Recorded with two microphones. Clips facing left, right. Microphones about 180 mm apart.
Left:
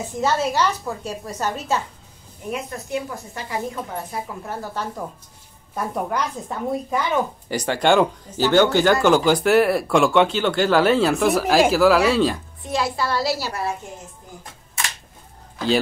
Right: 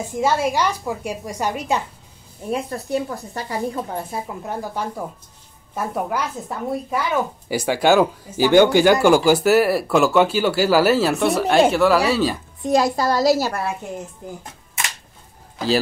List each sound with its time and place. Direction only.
0.0 s speech: 10° right (ahead or behind)
2.5 s a woman's voice: 35° right (ahead or behind)
4.5 s a woman's voice: 15° right (ahead or behind)
12.6 s a woman's voice: 45° right (ahead or behind)